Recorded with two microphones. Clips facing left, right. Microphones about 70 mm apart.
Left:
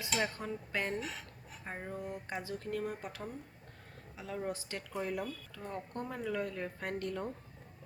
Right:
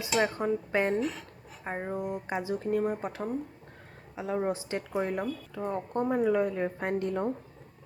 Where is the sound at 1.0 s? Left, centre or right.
Centre.